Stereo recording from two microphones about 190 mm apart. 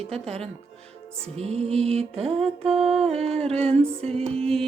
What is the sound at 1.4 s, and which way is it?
Mantra, 35° right (ahead or behind).